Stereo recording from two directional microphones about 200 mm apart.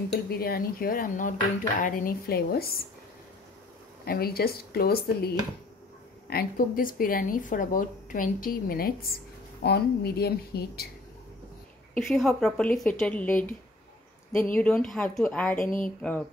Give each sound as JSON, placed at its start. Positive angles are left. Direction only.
{"t": 0.1, "sound": "speech", "side_deg": 50}
{"t": 4.0, "sound": "speech", "side_deg": 50}
{"t": 11.9, "sound": "speech", "side_deg": 0}